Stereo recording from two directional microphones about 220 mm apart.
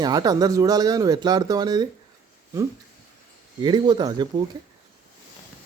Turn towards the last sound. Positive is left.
turn(degrees=-20)  # may be behind; listen again after turning